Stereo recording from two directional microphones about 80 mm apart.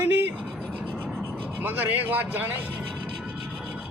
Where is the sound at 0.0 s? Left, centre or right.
Right.